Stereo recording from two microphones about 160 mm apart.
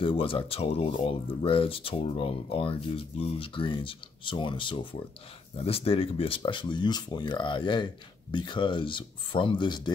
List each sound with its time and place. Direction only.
0.0 s speech: 35° left (ahead or behind)